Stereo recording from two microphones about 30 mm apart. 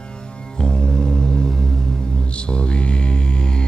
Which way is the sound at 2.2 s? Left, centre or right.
Left.